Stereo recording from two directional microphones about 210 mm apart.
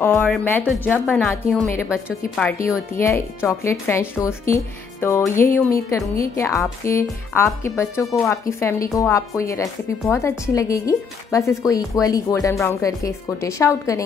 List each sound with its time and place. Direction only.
0.0 s a woman's voice: 5° left (ahead or behind)